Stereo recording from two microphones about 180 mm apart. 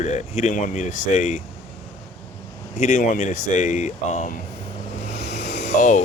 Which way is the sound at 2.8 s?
40° left (ahead or behind).